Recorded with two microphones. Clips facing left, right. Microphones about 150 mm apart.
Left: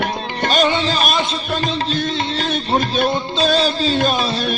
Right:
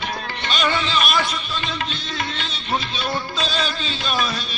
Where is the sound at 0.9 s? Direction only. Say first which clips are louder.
Left 3 dB; 40° left (ahead or behind).